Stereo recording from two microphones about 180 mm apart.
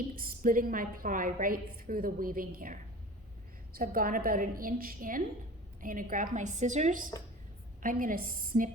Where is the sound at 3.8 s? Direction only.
50° right (ahead or behind).